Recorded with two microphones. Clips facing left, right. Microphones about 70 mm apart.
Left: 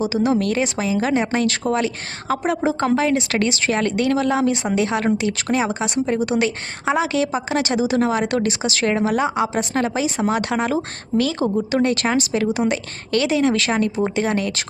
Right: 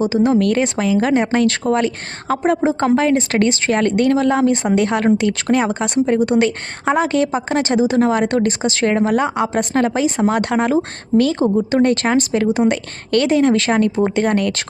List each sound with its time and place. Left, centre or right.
0.3 s a woman's voice: right